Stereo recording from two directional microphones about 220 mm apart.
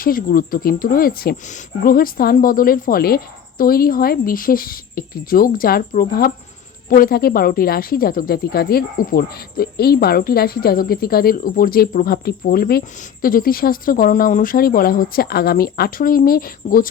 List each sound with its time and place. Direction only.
0.0 s a woman's voice: 40° left (ahead or behind)